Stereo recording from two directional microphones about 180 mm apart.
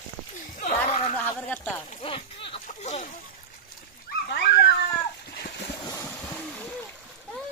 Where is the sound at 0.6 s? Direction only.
40° left (ahead or behind).